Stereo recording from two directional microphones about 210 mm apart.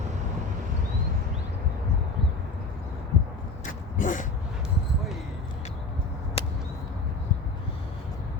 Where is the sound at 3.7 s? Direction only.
40° left (ahead or behind).